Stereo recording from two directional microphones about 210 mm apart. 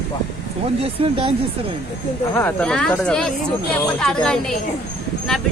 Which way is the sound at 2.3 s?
10° left (ahead or behind).